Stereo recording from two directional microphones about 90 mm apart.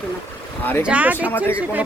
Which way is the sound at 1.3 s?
25° left (ahead or behind).